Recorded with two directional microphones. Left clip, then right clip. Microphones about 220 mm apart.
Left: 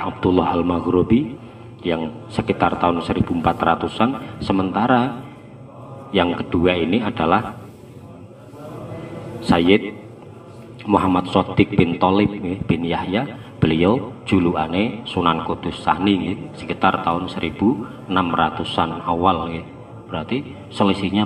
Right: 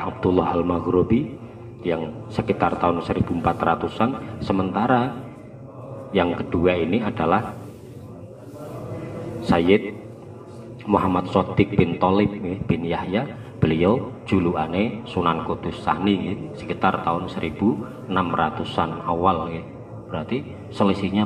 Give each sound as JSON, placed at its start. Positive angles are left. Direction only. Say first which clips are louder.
{"t": 0.0, "sound": "a man's voice", "louder": "left 2 dB", "side_deg": 25}
{"t": 9.5, "sound": "a man's voice", "louder": "left 2 dB", "side_deg": 25}